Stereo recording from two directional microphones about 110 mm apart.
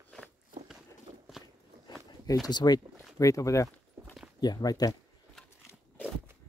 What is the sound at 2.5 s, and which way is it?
Speech, 40° left (ahead or behind).